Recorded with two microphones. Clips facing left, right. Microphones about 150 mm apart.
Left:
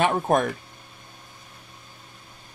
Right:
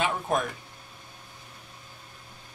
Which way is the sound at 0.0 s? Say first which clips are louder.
Left 6 dB; 55° left (ahead or behind).